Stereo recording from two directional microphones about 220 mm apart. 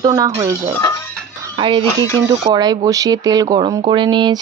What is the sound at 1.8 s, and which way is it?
Speech, 10° left (ahead or behind).